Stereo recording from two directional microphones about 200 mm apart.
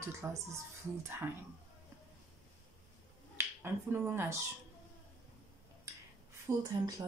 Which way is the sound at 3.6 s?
10° right (ahead or behind).